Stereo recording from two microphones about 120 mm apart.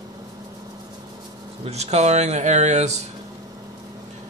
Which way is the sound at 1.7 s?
65° right (ahead or behind).